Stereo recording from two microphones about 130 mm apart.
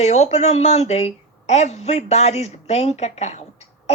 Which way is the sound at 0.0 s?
55° left (ahead or behind).